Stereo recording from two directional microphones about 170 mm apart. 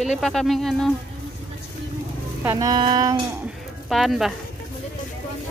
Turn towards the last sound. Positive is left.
turn(degrees=0)  # may be behind; listen again after turning